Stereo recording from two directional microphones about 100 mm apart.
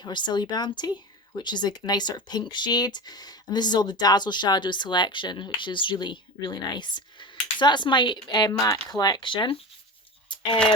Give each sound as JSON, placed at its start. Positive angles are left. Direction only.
{"t": 0.0, "sound": "speech", "side_deg": 45}